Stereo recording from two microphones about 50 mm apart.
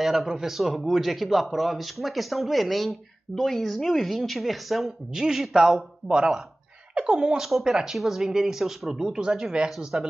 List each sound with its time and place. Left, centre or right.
0.0 s a man's voice: centre
7.4 s speech: centre